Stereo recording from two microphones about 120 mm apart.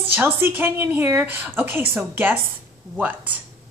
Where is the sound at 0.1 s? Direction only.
20° right (ahead or behind).